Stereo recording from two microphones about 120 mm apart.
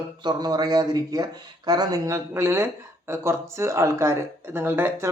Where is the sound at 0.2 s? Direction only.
35° right (ahead or behind).